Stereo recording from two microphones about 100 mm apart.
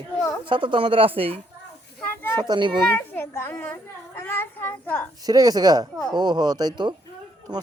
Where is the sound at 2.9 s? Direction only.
20° left (ahead or behind).